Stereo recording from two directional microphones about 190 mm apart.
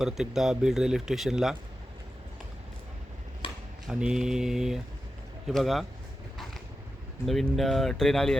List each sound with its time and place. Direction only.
0.0 s speech: centre (ahead or behind)
3.4 s a sound: 30° left (ahead or behind)
3.8 s speech: 5° right (ahead or behind)
7.3 s speech: centre (ahead or behind)